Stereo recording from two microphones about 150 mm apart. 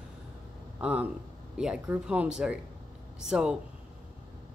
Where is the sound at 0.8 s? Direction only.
10° right (ahead or behind).